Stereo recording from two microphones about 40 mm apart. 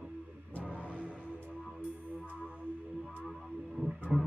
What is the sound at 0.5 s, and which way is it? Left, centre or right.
Music, left.